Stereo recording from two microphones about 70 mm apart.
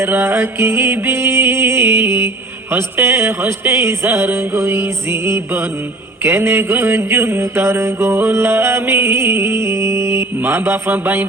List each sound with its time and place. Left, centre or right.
0.0 s mantra: right